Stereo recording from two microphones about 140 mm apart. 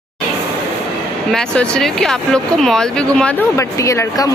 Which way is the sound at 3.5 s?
20° left (ahead or behind).